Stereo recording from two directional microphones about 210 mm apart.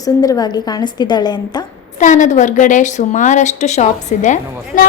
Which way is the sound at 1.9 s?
35° left (ahead or behind).